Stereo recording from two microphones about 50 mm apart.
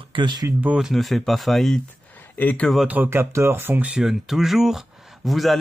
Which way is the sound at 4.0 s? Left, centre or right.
Centre.